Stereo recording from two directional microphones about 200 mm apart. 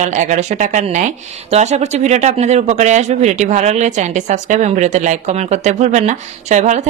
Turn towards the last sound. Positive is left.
turn(degrees=-35)  # may be behind; listen again after turning